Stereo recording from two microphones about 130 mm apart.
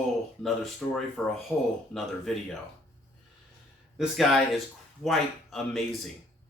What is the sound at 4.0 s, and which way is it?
Speech, centre (ahead or behind).